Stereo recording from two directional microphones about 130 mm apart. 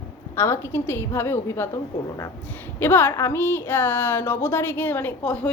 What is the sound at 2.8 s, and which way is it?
Speech, 15° left (ahead or behind).